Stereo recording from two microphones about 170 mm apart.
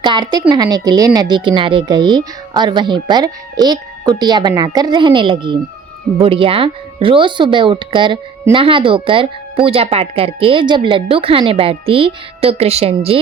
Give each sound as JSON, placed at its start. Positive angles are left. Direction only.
{"t": 0.0, "sound": "speech", "side_deg": -25}